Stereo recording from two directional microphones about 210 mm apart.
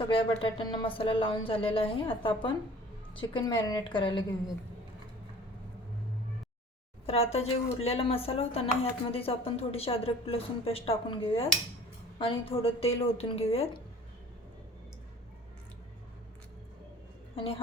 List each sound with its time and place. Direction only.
0.1 s speech: 25° left (ahead or behind)
7.1 s speech: 30° left (ahead or behind)
17.3 s a woman's voice: 25° left (ahead or behind)